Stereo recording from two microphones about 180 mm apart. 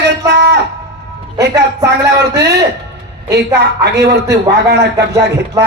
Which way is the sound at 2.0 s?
65° right (ahead or behind).